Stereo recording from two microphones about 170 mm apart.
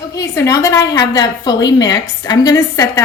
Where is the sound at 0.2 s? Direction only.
20° left (ahead or behind).